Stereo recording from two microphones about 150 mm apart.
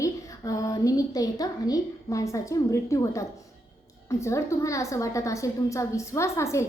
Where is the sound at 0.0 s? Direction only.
20° left (ahead or behind).